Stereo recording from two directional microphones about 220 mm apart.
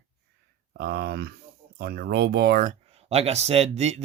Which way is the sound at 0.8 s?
45° right (ahead or behind).